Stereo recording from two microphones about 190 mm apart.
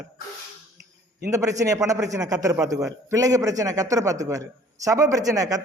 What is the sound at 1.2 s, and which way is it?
A man's voice, 15° right (ahead or behind).